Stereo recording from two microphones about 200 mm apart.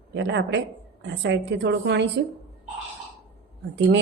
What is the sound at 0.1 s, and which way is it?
Speech, 60° right (ahead or behind).